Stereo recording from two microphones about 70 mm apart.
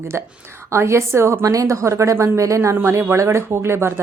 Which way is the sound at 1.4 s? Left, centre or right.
Right.